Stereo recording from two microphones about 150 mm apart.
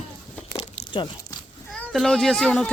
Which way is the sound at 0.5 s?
35° left (ahead or behind).